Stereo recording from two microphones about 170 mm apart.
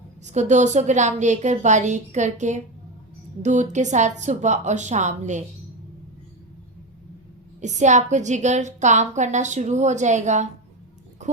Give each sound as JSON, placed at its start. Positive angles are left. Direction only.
{"t": 0.3, "sound": "a woman's voice", "side_deg": -45}
{"t": 7.6, "sound": "a woman's voice", "side_deg": -45}